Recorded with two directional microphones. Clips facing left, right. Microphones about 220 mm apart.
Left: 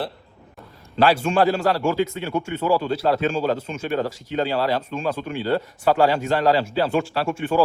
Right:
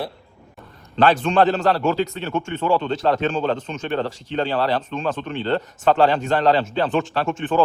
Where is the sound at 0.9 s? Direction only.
10° left (ahead or behind).